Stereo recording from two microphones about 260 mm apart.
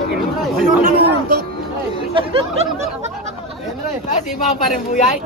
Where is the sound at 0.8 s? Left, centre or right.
Right.